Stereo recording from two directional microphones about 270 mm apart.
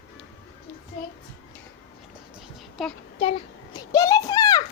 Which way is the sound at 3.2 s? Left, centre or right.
Left.